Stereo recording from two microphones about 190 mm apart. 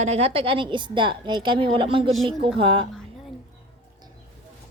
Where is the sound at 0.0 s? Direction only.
35° right (ahead or behind).